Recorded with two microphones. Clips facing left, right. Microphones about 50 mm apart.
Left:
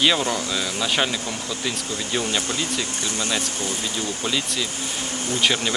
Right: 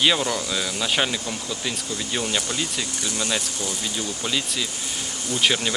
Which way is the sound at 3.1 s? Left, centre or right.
Left.